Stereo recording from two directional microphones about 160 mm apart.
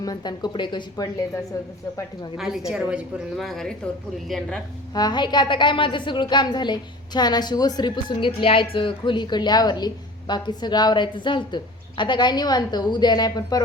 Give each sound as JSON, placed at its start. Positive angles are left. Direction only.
{"t": 0.0, "sound": "a woman's voice", "side_deg": 25}
{"t": 2.4, "sound": "a woman's voice", "side_deg": 0}
{"t": 4.9, "sound": "a woman's voice", "side_deg": 25}